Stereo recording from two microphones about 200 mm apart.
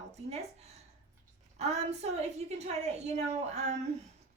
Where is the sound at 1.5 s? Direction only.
35° right (ahead or behind).